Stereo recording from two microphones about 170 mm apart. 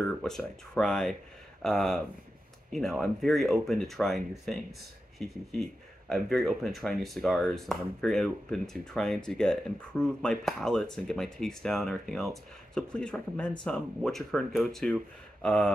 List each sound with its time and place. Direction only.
0.0 s speech: 5° left (ahead or behind)
6.3 s speech: centre (ahead or behind)